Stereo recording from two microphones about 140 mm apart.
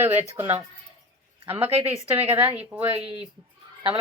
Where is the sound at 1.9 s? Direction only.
15° right (ahead or behind).